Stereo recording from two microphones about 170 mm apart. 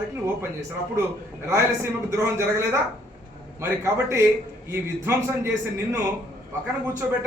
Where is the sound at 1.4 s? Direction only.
15° right (ahead or behind).